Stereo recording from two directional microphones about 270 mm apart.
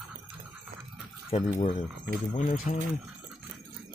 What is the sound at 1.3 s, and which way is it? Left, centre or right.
Speech, left.